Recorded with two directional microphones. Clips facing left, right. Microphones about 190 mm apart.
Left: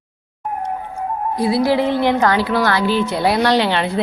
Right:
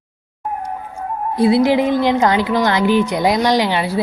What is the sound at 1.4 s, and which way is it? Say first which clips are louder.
Speech: right 3 dB; 25° right (ahead or behind).